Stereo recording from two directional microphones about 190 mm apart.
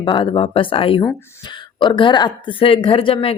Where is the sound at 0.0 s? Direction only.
25° left (ahead or behind).